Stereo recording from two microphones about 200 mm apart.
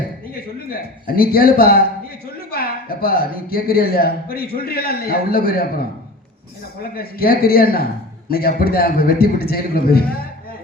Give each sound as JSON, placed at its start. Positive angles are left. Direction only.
{"t": 0.3, "sound": "a woman's voice", "side_deg": 45}
{"t": 6.9, "sound": "a woman's voice", "side_deg": 50}